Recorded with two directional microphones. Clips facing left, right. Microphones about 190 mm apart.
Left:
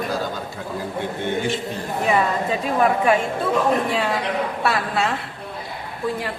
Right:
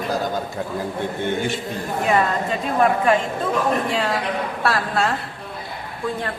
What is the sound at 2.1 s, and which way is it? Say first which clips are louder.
A woman's voice: even; 5° left (ahead or behind).